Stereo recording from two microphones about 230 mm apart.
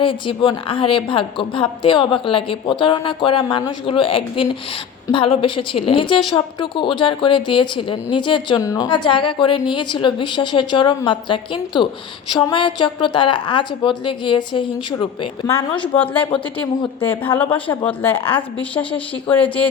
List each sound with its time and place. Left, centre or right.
0.0 s a woman's voice: left